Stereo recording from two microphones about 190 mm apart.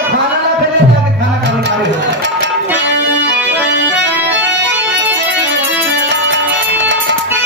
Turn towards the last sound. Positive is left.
turn(degrees=-70)  # may be behind; listen again after turning